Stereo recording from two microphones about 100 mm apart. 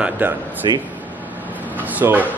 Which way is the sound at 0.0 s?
20° right (ahead or behind).